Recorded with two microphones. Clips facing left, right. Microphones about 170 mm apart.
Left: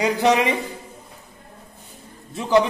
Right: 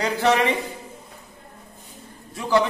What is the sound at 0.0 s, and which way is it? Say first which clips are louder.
Speech: left 2 dB; 15° left (ahead or behind).